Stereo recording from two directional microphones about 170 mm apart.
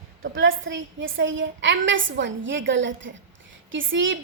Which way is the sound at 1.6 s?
90° right.